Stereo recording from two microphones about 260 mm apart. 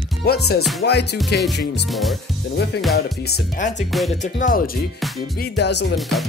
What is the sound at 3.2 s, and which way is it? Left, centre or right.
Speech, left.